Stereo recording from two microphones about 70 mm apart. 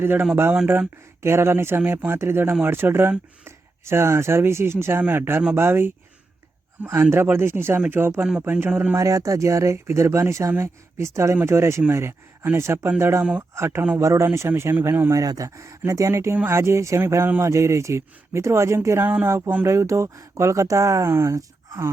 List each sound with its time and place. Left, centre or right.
0.0 s speech: right
8.4 s speech: right
9.0 s speech: right
15.1 s speech: right
21.1 s speech: right